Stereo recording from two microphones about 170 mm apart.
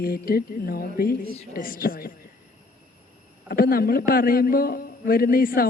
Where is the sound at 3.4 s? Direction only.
60° left (ahead or behind).